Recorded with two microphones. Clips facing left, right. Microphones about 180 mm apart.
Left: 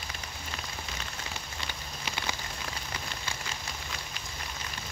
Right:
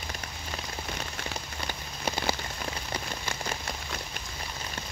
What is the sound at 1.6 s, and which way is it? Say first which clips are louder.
Rain on surface: right 9 dB; 40° right (ahead or behind).